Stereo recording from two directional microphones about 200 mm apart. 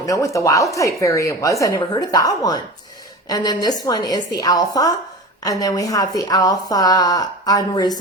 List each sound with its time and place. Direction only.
0.0 s a woman's voice: 15° left (ahead or behind)